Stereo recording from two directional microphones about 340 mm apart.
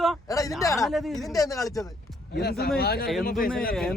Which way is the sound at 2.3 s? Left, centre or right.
Left.